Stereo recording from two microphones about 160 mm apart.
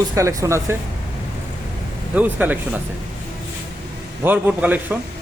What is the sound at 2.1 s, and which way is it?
Speech, 10° right (ahead or behind).